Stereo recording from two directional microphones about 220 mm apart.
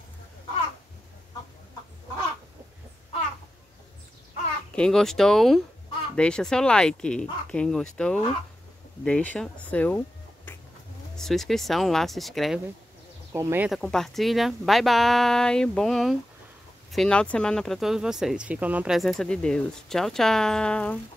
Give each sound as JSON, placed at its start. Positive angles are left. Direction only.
{"t": 4.7, "sound": "speech", "side_deg": 5}
{"t": 13.3, "sound": "speech", "side_deg": -10}
{"t": 13.7, "sound": "speech", "side_deg": 5}